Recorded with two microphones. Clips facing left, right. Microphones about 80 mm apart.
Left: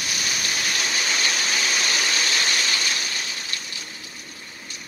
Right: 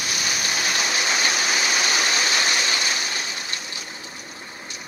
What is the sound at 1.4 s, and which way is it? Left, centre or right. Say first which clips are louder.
Waterfall: right 2 dB; centre.